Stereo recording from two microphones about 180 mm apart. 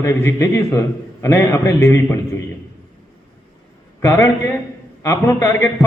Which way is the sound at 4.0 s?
15° left (ahead or behind).